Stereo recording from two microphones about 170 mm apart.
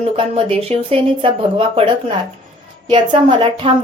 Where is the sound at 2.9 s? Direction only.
30° right (ahead or behind).